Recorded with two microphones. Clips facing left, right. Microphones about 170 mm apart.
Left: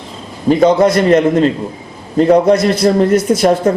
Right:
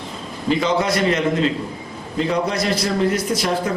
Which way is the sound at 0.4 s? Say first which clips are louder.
Left 10 dB; 45° left (ahead or behind).